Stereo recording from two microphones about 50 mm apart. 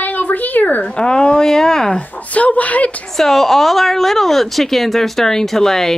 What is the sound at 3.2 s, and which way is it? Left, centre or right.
Speech, centre.